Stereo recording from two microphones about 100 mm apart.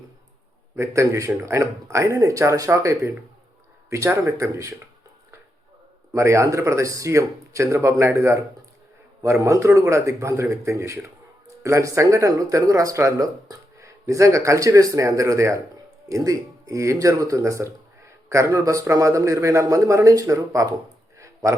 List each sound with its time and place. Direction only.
0.8 s speech: 30° right (ahead or behind)
6.1 s speech: 30° right (ahead or behind)